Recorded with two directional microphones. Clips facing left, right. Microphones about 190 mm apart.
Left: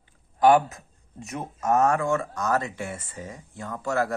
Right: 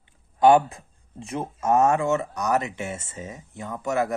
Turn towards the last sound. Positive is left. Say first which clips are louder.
# right 1 dB
turn(degrees=-20)  # may be behind; listen again after turning